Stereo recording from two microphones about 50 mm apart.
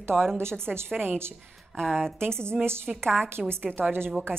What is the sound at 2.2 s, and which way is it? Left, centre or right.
Speech, right.